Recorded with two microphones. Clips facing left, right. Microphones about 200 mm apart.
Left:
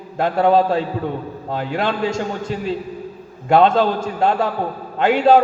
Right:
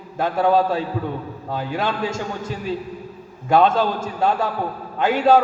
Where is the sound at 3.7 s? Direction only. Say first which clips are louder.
Left 4 dB; 25° left (ahead or behind).